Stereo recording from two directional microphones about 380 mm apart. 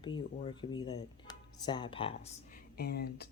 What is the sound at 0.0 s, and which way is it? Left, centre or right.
Speech, centre.